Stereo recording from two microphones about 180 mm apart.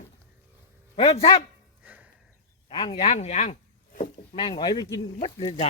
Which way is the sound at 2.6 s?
30° left (ahead or behind).